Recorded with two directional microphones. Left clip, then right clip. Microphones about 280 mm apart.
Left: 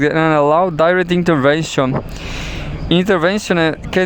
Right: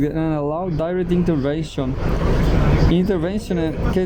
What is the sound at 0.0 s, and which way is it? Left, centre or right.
Speech, left.